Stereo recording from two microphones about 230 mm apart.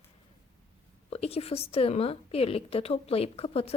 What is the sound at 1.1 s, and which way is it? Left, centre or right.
A woman's voice, left.